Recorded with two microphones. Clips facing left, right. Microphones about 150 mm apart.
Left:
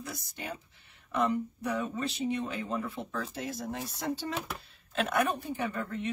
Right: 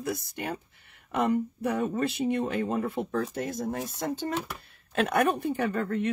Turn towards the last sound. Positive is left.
turn(degrees=-65)  # may be behind; listen again after turning